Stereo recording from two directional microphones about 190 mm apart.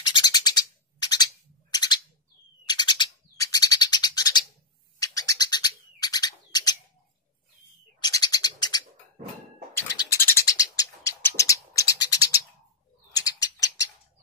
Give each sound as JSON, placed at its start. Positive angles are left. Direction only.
{"t": 0.0, "sound": "a sound", "side_deg": 20}
{"t": 2.6, "sound": "bird", "side_deg": 20}
{"t": 8.0, "sound": "bird", "side_deg": 20}